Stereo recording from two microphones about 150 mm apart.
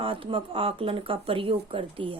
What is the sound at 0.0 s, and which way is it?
Speech, 35° right (ahead or behind).